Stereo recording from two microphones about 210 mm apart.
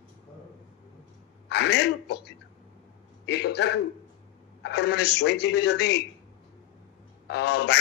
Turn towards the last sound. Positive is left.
turn(degrees=55)  # may be behind; listen again after turning